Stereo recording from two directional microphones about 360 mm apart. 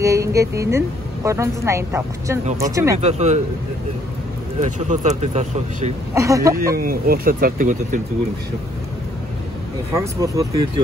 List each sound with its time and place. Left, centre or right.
0.0 s a woman's voice: centre
4.6 s speech: centre
6.1 s a woman's voice: centre
6.5 s speech: right
9.9 s a woman's voice: centre